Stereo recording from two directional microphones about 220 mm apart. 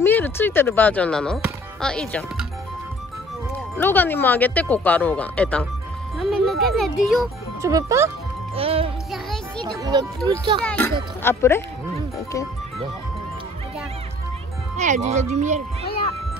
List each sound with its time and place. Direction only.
0.0 s speech: 10° left (ahead or behind)
3.7 s speech: 10° left (ahead or behind)
6.1 s music: centre (ahead or behind)
6.6 s a child's voice: centre (ahead or behind)
7.6 s speech: 15° right (ahead or behind)
8.5 s music: 25° right (ahead or behind)
9.1 s music: centre (ahead or behind)
9.8 s speech: 20° right (ahead or behind)
10.6 s a child's voice: 5° left (ahead or behind)
14.8 s speech: 30° right (ahead or behind)